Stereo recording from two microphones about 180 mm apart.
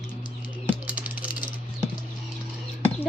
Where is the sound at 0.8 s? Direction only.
10° right (ahead or behind).